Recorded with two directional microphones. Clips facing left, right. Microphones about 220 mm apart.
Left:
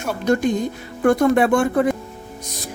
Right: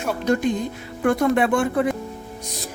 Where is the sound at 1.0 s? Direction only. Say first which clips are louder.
Left 3 dB; 45° left (ahead or behind).